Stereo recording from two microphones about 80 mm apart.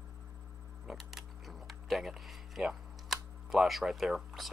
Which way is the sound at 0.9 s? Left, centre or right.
Centre.